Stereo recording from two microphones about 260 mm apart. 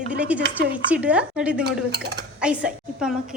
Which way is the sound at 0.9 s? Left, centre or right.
Centre.